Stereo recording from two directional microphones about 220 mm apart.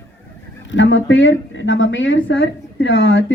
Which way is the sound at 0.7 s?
60° left (ahead or behind).